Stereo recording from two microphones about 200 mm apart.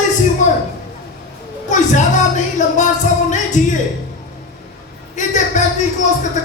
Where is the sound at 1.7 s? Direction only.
35° left (ahead or behind).